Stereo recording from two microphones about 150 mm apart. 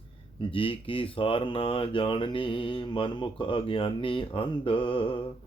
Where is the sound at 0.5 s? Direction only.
35° left (ahead or behind).